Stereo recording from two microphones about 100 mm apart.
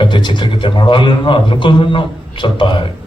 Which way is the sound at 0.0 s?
55° left (ahead or behind).